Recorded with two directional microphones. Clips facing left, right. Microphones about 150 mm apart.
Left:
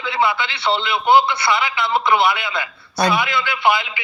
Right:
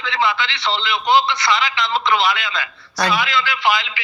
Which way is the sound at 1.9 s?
25° left (ahead or behind).